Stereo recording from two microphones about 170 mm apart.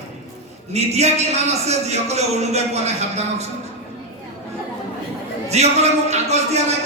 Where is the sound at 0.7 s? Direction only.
40° right (ahead or behind).